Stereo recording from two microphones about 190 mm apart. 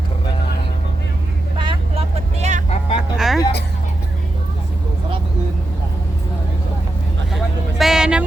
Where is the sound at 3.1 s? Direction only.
Centre (ahead or behind).